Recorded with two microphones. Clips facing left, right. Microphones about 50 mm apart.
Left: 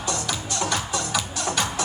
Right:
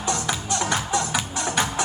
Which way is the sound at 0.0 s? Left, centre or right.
Right.